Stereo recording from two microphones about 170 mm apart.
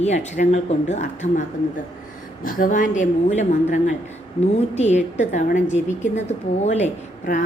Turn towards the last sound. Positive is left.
turn(degrees=45)  # may be behind; listen again after turning